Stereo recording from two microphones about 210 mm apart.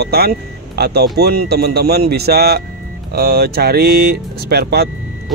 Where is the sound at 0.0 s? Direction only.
50° right (ahead or behind).